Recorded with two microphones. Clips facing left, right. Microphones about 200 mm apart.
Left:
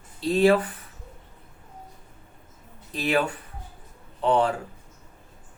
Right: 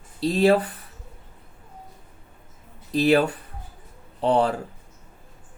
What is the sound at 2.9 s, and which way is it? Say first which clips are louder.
Speech: right 6 dB; 35° right (ahead or behind).